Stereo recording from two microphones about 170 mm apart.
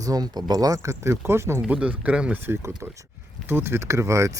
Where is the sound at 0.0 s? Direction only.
20° right (ahead or behind).